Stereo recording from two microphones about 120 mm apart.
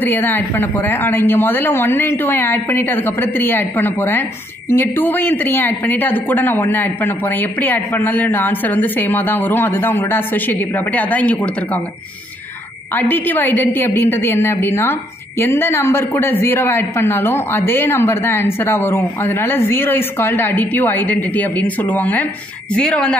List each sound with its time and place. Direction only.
0.0 s a man's voice: 15° left (ahead or behind)
12.9 s a woman's voice: 15° left (ahead or behind)